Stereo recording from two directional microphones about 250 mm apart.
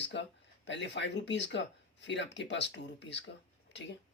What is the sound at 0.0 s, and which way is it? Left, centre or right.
Speech, left.